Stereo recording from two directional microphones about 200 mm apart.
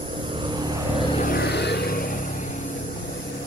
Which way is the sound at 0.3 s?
25° right (ahead or behind).